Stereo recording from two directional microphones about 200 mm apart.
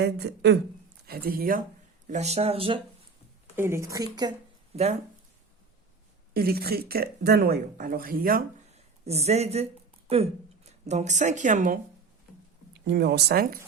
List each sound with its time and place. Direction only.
0.0 s speech: 55° right (ahead or behind)
2.0 s speech: 35° right (ahead or behind)
3.5 s speech: 10° right (ahead or behind)
4.7 s speech: 35° right (ahead or behind)
6.3 s speech: 50° right (ahead or behind)
8.7 s speech: 30° right (ahead or behind)
12.7 s speech: 60° right (ahead or behind)